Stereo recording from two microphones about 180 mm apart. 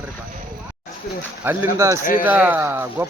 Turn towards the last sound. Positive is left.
turn(degrees=-15)  # may be behind; listen again after turning